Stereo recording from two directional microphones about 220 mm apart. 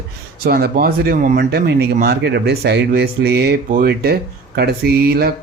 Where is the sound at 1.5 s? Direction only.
50° right (ahead or behind).